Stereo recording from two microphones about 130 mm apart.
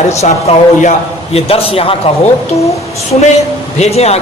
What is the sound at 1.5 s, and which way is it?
Speech, 50° left (ahead or behind).